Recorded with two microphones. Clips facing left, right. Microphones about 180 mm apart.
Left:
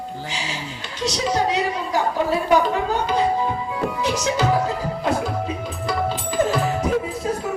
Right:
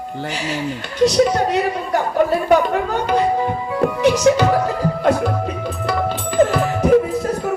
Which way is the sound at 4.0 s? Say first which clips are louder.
Right 9 dB; 65° right (ahead or behind).